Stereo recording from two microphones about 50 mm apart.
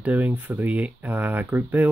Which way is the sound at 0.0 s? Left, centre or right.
Right.